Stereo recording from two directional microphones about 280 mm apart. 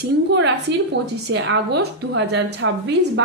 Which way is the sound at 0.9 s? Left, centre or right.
Right.